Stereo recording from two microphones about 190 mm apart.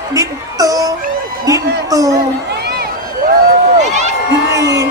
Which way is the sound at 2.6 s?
55° right (ahead or behind).